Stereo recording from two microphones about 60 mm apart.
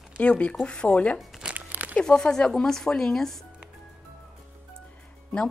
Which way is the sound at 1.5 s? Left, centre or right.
Right.